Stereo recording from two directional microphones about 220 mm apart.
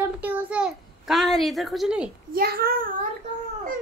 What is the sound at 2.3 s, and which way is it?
Speech, 45° right (ahead or behind).